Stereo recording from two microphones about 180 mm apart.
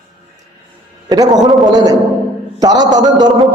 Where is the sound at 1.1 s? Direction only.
20° right (ahead or behind).